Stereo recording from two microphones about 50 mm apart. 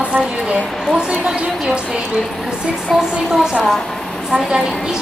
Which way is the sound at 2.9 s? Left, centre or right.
Centre.